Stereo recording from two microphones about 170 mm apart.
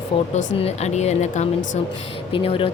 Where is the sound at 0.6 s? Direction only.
40° left (ahead or behind).